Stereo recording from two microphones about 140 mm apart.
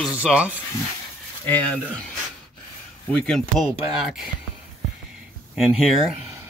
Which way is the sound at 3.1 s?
5° left (ahead or behind).